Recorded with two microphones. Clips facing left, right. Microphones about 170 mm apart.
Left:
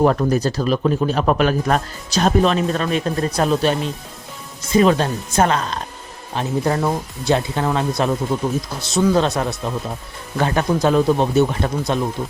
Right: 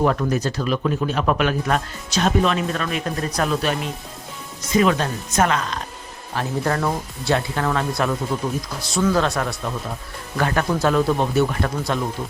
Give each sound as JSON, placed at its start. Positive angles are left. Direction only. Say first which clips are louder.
{"t": 0.0, "sound": "a man's voice", "louder": "left 4 dB", "side_deg": 35}
{"t": 6.3, "sound": "speech", "louder": "left 3 dB", "side_deg": 20}